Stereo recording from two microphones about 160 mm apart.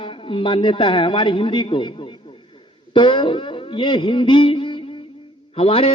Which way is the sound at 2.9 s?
30° left (ahead or behind).